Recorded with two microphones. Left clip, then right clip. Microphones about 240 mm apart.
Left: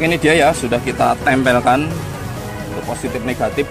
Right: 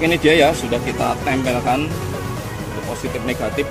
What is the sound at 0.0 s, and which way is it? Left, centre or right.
Speech, left.